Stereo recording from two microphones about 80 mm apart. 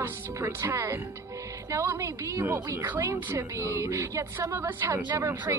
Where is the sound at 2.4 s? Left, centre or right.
Right.